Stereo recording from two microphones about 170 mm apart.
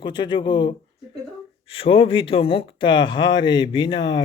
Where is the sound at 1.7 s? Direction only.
30° left (ahead or behind).